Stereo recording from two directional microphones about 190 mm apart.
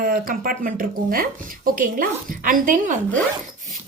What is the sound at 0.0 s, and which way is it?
Speech, 50° right (ahead or behind).